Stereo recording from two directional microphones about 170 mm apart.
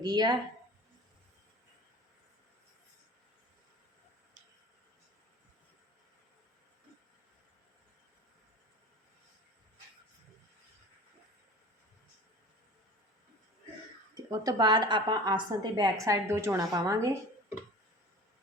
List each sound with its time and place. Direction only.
0.0 s a woman's voice: 25° right (ahead or behind)
14.3 s a woman's voice: 25° right (ahead or behind)